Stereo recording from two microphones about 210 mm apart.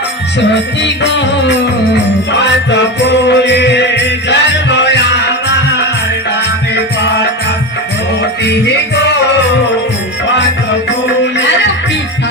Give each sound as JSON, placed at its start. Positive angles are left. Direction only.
{"t": 0.5, "sound": "music", "side_deg": 55}
{"t": 8.4, "sound": "music", "side_deg": 55}